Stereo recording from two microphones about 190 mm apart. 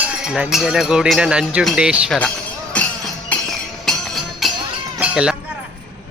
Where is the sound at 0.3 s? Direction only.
5° right (ahead or behind).